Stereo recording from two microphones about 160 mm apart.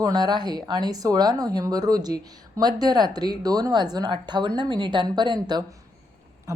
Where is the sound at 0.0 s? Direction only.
25° right (ahead or behind).